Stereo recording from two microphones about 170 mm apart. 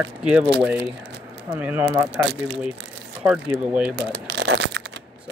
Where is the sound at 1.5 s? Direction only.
10° right (ahead or behind).